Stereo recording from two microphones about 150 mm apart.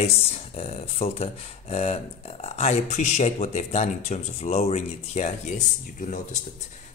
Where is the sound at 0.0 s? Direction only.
45° left (ahead or behind).